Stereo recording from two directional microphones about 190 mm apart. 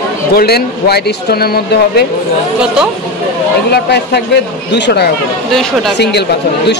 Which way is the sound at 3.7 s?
60° left (ahead or behind).